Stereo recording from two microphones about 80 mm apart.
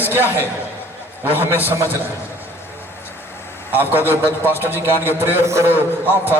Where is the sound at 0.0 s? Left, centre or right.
Right.